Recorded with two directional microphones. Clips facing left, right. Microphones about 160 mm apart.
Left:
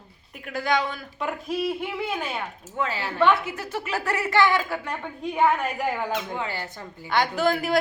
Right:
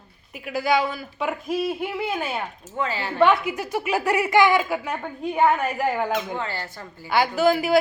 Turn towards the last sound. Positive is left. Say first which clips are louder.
# right 4 dB
turn(degrees=-5)  # may be behind; listen again after turning